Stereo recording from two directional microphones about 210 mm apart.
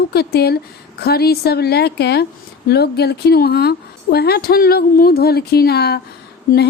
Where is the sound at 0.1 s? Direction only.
50° left (ahead or behind).